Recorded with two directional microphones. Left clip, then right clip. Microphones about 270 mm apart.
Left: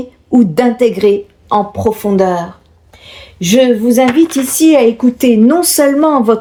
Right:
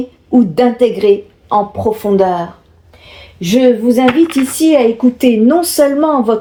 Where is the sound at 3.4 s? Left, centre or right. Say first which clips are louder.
Left 1 dB; left.